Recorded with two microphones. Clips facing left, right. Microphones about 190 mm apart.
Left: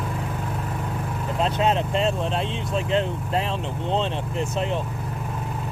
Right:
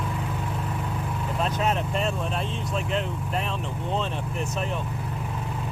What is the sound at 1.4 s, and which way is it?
Vehicle, 25° left (ahead or behind).